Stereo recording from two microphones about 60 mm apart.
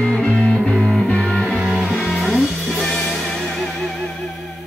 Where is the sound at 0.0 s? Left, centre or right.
Centre.